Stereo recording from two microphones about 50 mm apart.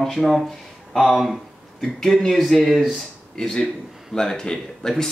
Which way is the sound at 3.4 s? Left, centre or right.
Centre.